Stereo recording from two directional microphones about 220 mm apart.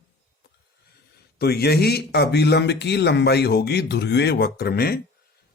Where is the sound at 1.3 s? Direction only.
45° left (ahead or behind).